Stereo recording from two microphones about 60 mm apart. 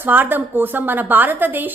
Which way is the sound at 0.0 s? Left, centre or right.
Right.